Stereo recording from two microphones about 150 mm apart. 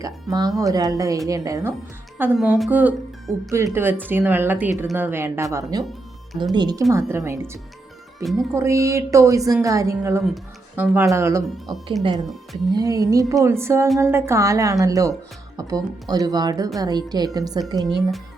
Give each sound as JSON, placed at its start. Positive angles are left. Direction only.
{"t": 0.0, "sound": "a woman's voice", "side_deg": -25}
{"t": 5.9, "sound": "music", "side_deg": 0}
{"t": 6.5, "sound": "a woman's voice", "side_deg": -25}
{"t": 17.8, "sound": "speech", "side_deg": 0}